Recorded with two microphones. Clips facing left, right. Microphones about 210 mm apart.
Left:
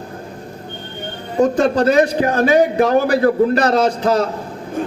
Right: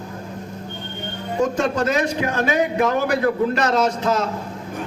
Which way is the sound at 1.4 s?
35° left (ahead or behind).